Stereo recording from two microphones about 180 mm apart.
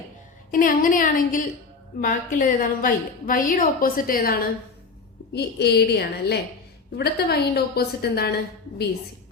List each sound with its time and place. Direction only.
0.5 s a woman's voice: 50° left (ahead or behind)
5.3 s a woman's voice: 65° left (ahead or behind)